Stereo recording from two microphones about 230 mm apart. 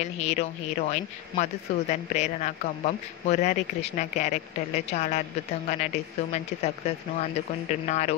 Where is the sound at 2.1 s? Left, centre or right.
Left.